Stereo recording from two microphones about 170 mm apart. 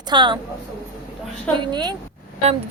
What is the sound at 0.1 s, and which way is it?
Speech, 25° right (ahead or behind).